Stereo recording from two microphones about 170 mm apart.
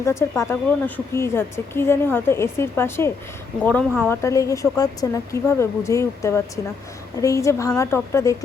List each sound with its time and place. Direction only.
0.0 s a woman's voice: 15° left (ahead or behind)